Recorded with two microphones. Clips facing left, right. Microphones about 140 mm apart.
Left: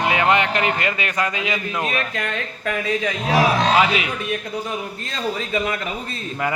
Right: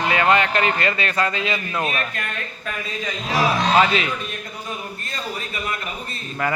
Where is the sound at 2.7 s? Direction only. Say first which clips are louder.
Left 7 dB; 75° left (ahead or behind).